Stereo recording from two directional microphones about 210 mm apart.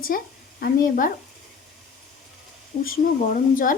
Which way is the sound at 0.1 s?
45° left (ahead or behind).